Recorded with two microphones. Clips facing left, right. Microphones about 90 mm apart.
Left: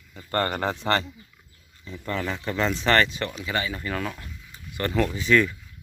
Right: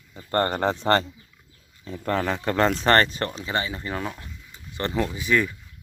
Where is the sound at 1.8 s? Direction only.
50° right (ahead or behind); by 4.9 s 25° right (ahead or behind).